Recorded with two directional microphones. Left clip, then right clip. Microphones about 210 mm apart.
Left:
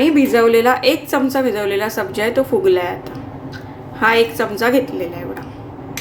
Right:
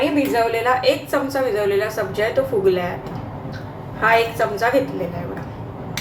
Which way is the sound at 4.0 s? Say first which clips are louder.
Left 2 dB; 40° left (ahead or behind).